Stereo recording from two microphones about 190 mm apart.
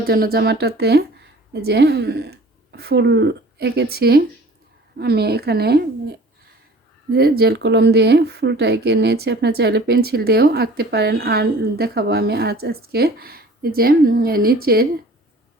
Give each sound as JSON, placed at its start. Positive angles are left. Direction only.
{"t": 0.0, "sound": "speech", "side_deg": -55}